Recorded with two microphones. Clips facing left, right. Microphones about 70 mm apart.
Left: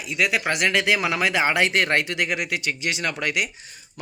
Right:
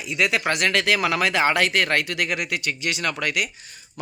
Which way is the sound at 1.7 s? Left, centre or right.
Left.